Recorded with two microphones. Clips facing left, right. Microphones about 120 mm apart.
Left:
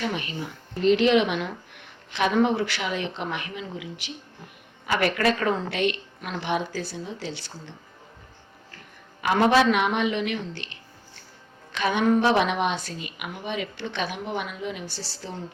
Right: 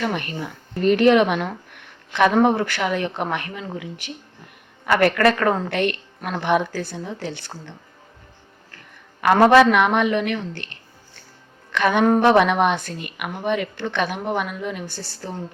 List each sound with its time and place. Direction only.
0.0 s a woman's voice: 55° right (ahead or behind)
9.2 s a woman's voice: 55° right (ahead or behind)